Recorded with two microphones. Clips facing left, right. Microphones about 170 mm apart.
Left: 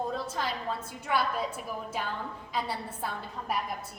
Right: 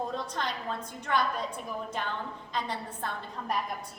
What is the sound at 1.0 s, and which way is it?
A woman's voice, 5° left (ahead or behind).